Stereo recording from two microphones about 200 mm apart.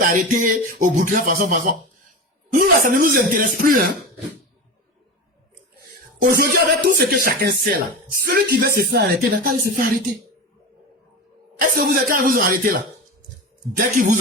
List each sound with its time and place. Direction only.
0.1 s speech: 40° right (ahead or behind)
6.2 s speech: 50° right (ahead or behind)
11.6 s speech: 45° right (ahead or behind)
13.7 s speech: 40° right (ahead or behind)